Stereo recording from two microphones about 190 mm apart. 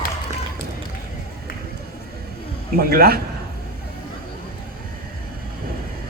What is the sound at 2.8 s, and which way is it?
Speech, 50° right (ahead or behind).